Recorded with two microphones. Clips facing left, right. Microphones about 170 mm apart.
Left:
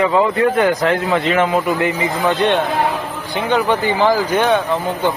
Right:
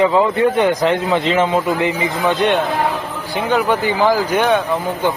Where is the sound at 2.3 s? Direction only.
10° right (ahead or behind).